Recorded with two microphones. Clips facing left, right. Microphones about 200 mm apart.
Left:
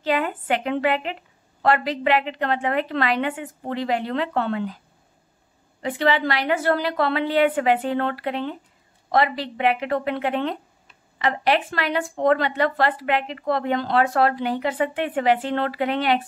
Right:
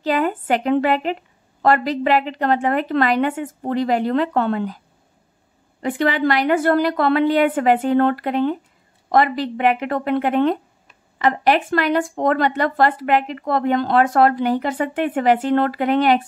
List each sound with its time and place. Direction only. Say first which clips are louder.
0.0 s a woman's voice: right 4 dB; 40° right (ahead or behind)
5.8 s speech: right 2 dB; 50° right (ahead or behind)